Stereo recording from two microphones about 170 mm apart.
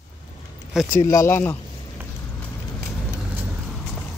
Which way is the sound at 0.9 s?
15° left (ahead or behind).